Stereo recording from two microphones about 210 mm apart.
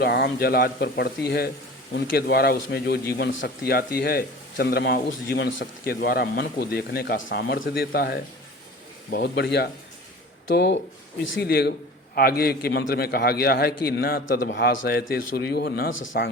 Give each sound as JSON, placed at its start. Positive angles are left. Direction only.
{"t": 0.0, "sound": "a man's voice", "side_deg": 50}
{"t": 7.2, "sound": "speech", "side_deg": 65}
{"t": 7.7, "sound": "a man's voice", "side_deg": 45}
{"t": 15.9, "sound": "speech", "side_deg": 65}